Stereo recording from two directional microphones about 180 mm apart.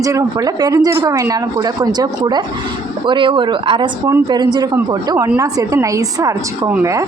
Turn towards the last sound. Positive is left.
turn(degrees=-15)  # may be behind; listen again after turning